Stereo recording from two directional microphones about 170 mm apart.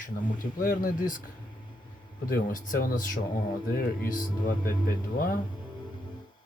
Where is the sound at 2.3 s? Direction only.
55° left (ahead or behind).